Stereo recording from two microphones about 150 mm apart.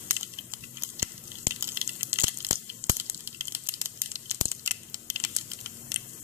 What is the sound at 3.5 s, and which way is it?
Crumpling, 15° right (ahead or behind).